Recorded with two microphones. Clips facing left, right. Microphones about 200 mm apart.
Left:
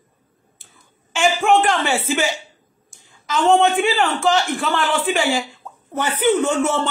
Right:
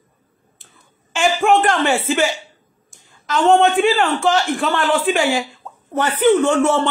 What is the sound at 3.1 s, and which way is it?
A man's voice, centre (ahead or behind).